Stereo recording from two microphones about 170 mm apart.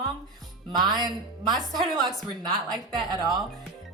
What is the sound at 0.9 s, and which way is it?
Speech, 25° right (ahead or behind).